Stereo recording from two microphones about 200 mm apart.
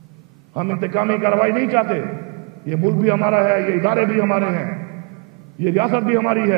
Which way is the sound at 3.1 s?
15° right (ahead or behind).